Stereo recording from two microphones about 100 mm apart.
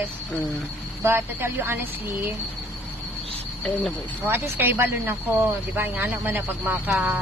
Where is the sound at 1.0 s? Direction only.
25° right (ahead or behind).